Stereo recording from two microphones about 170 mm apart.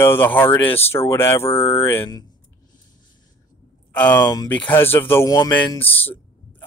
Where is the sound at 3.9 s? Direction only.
10° left (ahead or behind).